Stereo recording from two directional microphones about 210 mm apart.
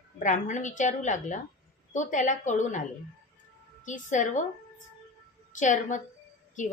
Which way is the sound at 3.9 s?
35° left (ahead or behind).